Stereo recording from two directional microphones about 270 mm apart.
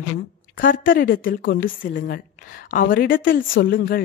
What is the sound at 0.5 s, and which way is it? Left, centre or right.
A woman's voice, left.